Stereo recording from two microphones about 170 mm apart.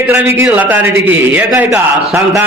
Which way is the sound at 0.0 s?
10° right (ahead or behind).